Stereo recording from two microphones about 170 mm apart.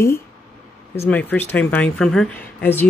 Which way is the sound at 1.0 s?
10° left (ahead or behind).